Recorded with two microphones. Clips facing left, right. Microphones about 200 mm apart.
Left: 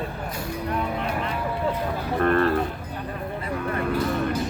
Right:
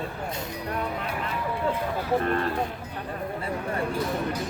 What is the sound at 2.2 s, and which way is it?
Speech, 60° left (ahead or behind).